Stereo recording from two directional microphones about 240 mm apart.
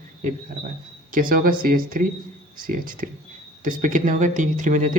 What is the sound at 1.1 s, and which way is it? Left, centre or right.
A man's voice, right.